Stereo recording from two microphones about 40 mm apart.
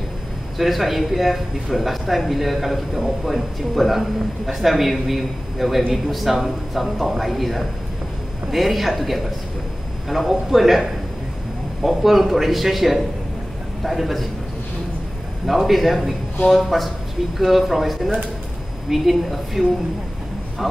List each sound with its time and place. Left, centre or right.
0.6 s a man's voice: centre
15.4 s a man's voice: centre